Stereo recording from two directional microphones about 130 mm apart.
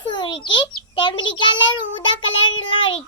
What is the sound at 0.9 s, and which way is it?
A child's voice, 35° left (ahead or behind).